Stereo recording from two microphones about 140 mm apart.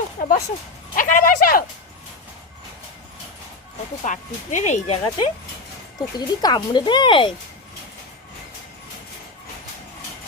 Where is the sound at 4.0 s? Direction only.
60° left (ahead or behind).